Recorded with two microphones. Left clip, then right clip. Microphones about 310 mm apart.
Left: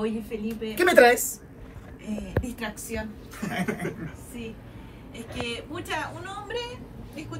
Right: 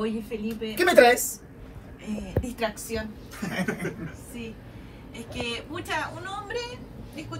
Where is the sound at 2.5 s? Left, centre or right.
Centre.